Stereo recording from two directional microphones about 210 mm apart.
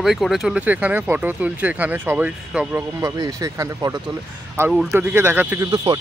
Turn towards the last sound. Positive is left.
turn(degrees=-20)  # may be behind; listen again after turning